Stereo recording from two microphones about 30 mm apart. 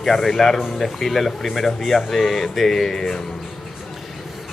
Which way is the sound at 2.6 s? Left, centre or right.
Centre.